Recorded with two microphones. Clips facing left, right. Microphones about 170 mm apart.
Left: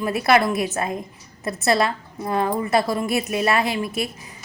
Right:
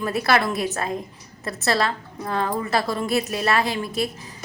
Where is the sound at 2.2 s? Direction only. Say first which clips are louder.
Left 3 dB; 20° left (ahead or behind).